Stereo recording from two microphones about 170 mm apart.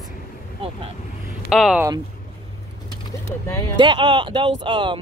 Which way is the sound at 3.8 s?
30° right (ahead or behind).